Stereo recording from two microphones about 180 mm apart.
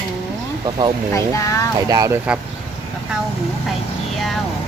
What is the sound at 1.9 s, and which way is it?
Speech, 20° right (ahead or behind).